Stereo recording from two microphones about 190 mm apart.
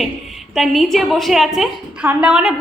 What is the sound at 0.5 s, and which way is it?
A woman's voice, centre (ahead or behind).